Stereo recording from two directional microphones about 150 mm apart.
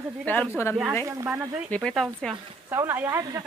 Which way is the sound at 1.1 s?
20° right (ahead or behind).